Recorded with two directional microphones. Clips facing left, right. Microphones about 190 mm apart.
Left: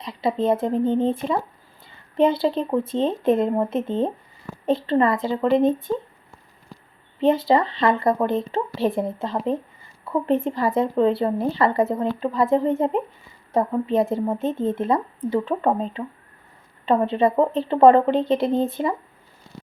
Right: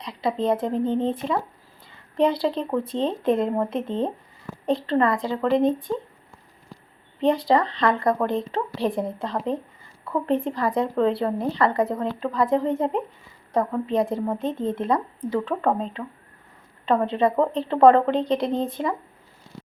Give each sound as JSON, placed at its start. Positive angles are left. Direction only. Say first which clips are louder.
{"t": 0.0, "sound": "speech", "louder": "left 2 dB", "side_deg": 5}
{"t": 2.1, "sound": "speech", "louder": "left 2 dB", "side_deg": 0}
{"t": 7.2, "sound": "speech", "louder": "left 2 dB", "side_deg": 0}
{"t": 11.7, "sound": "speech", "louder": "left 2 dB", "side_deg": 25}
{"t": 11.9, "sound": "speech", "louder": "left 2 dB", "side_deg": 5}
{"t": 14.9, "sound": "speech", "louder": "left 2 dB", "side_deg": 25}
{"t": 15.4, "sound": "speech", "louder": "left 2 dB", "side_deg": 5}
{"t": 17.1, "sound": "speech", "louder": "left 2 dB", "side_deg": 0}